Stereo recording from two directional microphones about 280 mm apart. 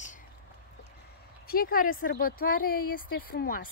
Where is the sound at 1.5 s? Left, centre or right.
Left.